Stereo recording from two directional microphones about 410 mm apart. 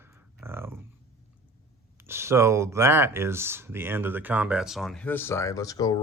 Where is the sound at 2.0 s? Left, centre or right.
Centre.